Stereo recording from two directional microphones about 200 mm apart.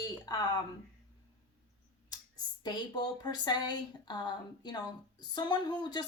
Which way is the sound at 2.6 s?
20° left (ahead or behind).